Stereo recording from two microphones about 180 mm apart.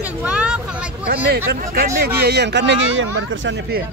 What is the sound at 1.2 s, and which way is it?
Speech, 60° right (ahead or behind).